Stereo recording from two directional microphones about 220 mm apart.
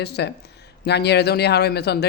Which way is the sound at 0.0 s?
50° left (ahead or behind).